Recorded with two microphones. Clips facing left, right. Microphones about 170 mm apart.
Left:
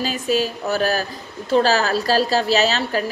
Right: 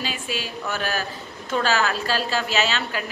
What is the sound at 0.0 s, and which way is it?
A woman's voice, 40° left (ahead or behind).